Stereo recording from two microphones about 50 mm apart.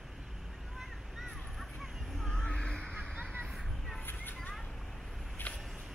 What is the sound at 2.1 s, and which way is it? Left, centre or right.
Crow, centre.